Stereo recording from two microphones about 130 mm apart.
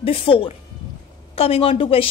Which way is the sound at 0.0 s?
45° left (ahead or behind).